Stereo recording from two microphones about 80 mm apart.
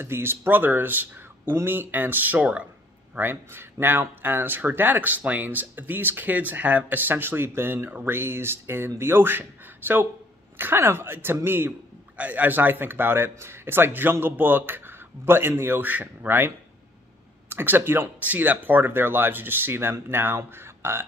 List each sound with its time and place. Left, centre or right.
0.0 s speech: right